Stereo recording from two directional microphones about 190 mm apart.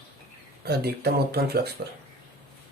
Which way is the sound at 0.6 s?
55° right (ahead or behind).